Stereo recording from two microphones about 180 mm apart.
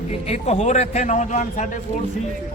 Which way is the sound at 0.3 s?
35° left (ahead or behind).